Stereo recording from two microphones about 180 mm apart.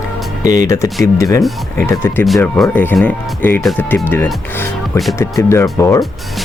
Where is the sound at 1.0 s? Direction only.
15° left (ahead or behind).